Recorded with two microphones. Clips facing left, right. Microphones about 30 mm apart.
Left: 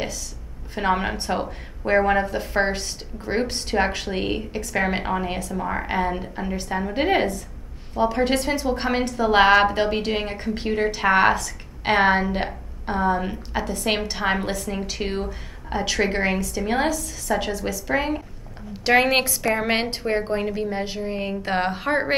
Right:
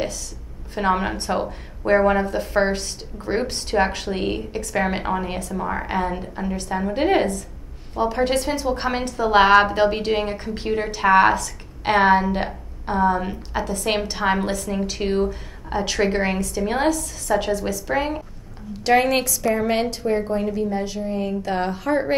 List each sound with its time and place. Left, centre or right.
0.7 s a woman's voice: centre
18.7 s a sound: centre
19.0 s a woman's voice: left